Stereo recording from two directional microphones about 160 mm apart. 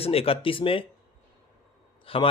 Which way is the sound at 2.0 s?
35° left (ahead or behind).